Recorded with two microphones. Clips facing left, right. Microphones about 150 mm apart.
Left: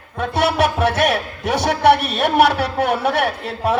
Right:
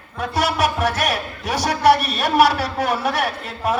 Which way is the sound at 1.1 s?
60° left (ahead or behind).